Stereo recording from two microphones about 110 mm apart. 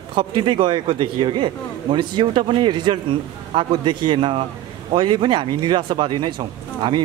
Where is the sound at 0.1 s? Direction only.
50° right (ahead or behind).